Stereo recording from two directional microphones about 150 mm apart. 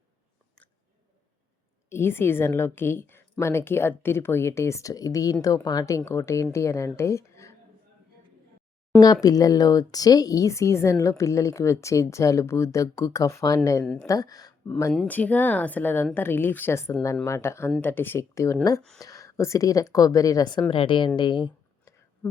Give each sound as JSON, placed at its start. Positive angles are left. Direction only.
{"t": 1.9, "sound": "a woman's voice", "side_deg": 15}
{"t": 9.2, "sound": "speech", "side_deg": 25}
{"t": 13.8, "sound": "speech", "side_deg": 5}
{"t": 14.1, "sound": "speech", "side_deg": 25}
{"t": 14.9, "sound": "a woman's voice", "side_deg": 10}
{"t": 21.2, "sound": "a sound", "side_deg": 30}